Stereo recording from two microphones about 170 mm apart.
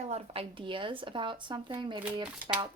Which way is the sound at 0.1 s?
30° right (ahead or behind).